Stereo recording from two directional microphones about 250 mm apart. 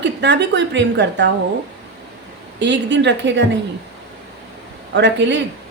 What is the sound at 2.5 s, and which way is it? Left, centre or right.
Speech, right.